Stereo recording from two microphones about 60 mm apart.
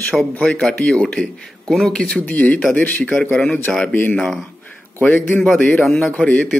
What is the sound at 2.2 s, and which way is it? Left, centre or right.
Speech, left.